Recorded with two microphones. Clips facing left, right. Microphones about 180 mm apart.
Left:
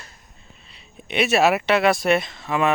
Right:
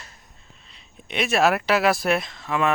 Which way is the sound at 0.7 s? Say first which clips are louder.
Left 4 dB; 5° left (ahead or behind).